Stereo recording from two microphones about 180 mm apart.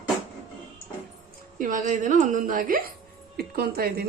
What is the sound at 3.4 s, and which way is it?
Speech, 60° right (ahead or behind).